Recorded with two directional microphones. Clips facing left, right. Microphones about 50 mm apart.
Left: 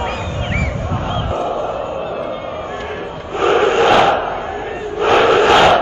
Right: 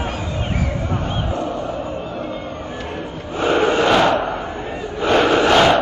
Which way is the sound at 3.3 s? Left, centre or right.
Left.